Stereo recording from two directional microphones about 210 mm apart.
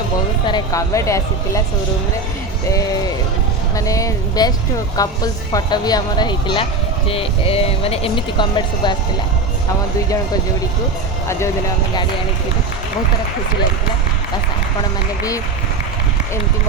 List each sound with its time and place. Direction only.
0.4 s speech: 20° left (ahead or behind)
3.8 s speech: 15° left (ahead or behind)